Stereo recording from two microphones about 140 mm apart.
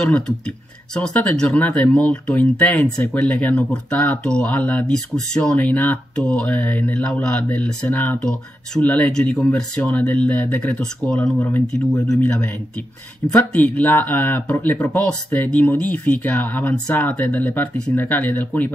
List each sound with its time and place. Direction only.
0.9 s speech: 5° left (ahead or behind)
11.3 s speech: 25° left (ahead or behind)
12.1 s speech: 10° left (ahead or behind)